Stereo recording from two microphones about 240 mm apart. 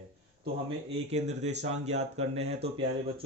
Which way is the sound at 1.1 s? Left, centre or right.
Right.